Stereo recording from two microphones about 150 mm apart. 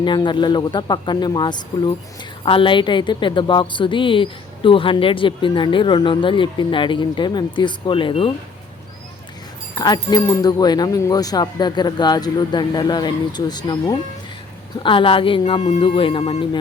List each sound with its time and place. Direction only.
0.0 s a woman's voice: 30° left (ahead or behind)
9.7 s a woman's voice: 25° left (ahead or behind)